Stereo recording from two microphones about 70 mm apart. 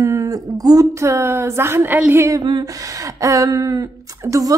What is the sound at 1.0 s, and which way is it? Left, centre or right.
A woman's voice, right.